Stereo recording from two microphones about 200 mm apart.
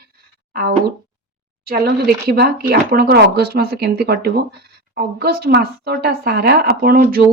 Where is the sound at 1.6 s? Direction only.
50° right (ahead or behind).